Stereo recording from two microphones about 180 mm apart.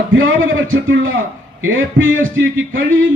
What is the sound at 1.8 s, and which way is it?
A man's voice, 90° right.